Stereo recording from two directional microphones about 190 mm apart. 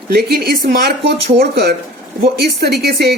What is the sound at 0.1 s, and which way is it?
Speech, 55° right (ahead or behind).